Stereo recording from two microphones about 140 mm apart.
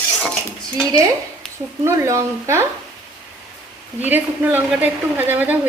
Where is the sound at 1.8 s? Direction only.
20° right (ahead or behind).